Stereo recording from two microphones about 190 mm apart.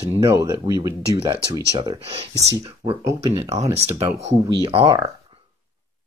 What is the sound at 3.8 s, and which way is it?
Speech, 35° right (ahead or behind).